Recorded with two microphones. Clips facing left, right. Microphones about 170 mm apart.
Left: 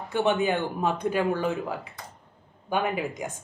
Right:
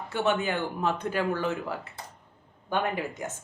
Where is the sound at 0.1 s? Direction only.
15° left (ahead or behind).